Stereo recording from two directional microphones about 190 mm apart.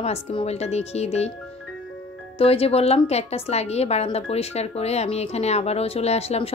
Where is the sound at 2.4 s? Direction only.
30° left (ahead or behind).